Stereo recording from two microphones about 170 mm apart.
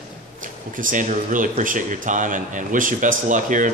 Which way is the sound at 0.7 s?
50° right (ahead or behind).